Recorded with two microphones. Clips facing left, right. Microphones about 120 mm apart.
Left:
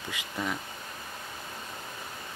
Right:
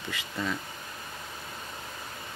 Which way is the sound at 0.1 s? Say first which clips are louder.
Right 1 dB; 15° left (ahead or behind).